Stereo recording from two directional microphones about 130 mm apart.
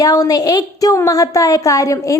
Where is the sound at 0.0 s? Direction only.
30° left (ahead or behind).